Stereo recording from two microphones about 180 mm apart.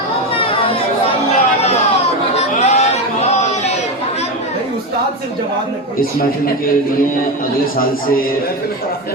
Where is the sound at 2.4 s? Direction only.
35° left (ahead or behind).